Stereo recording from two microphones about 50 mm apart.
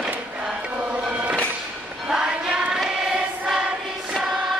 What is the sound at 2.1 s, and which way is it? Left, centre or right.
Choir, centre.